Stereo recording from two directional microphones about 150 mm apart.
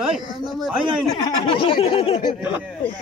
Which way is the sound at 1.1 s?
35° left (ahead or behind).